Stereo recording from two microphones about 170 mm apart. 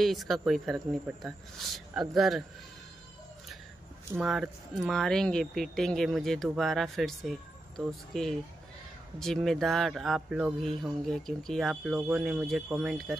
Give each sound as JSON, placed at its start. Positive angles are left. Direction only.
{"t": 0.0, "sound": "speech", "side_deg": 0}
{"t": 4.2, "sound": "speech", "side_deg": 0}